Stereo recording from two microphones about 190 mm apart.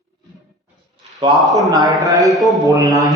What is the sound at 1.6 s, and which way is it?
Speech, 20° right (ahead or behind).